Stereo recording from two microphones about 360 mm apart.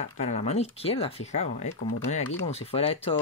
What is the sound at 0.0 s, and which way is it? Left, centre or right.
Speech, centre.